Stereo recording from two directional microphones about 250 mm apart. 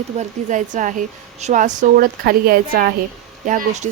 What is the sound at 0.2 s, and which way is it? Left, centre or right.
A woman's voice, right.